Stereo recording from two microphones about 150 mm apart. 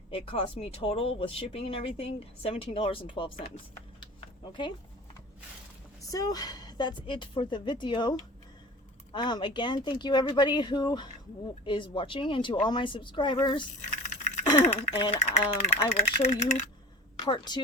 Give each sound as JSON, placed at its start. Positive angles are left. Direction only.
{"t": 0.1, "sound": "speech", "side_deg": 40}
{"t": 4.4, "sound": "speech", "side_deg": 30}
{"t": 6.1, "sound": "speech", "side_deg": 25}
{"t": 9.1, "sound": "speech", "side_deg": 30}
{"t": 14.6, "sound": "speech", "side_deg": 45}
{"t": 17.2, "sound": "a woman's voice", "side_deg": 30}